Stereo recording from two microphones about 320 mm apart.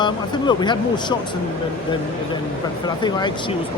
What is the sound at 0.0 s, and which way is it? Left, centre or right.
Speech, centre.